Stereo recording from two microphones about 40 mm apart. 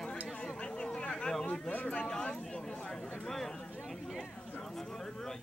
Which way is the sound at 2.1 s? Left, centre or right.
Left.